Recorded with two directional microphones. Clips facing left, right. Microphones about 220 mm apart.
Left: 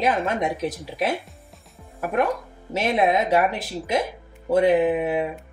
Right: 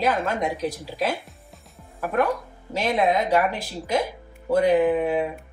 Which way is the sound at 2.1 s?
20° left (ahead or behind).